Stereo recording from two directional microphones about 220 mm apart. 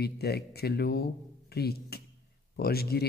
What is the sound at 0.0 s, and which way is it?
A man's voice, 45° left (ahead or behind).